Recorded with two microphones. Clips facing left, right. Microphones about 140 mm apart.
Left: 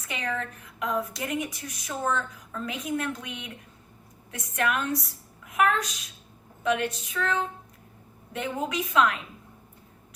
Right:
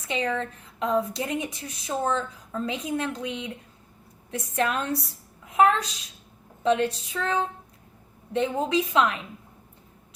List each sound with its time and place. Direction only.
0.0 s a woman's voice: 30° right (ahead or behind)